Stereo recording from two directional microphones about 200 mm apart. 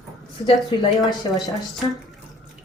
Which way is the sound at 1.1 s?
15° left (ahead or behind).